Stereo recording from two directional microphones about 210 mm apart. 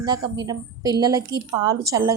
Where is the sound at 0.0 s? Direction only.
20° right (ahead or behind).